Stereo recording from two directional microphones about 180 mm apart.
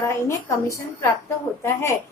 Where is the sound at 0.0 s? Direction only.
15° left (ahead or behind).